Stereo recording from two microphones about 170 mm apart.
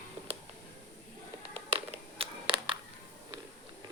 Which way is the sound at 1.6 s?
35° right (ahead or behind).